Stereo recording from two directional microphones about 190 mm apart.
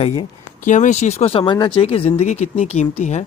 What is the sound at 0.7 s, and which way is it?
Speech, 40° left (ahead or behind).